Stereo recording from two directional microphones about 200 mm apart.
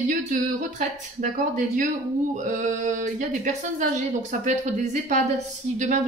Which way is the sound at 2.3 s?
40° right (ahead or behind).